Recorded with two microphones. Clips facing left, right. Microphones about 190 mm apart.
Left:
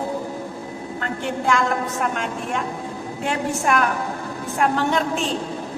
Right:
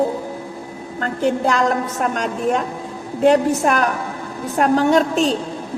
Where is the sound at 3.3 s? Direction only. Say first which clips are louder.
Right 8 dB; 40° right (ahead or behind).